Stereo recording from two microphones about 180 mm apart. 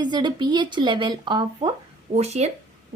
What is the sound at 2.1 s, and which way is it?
Speech, 35° right (ahead or behind).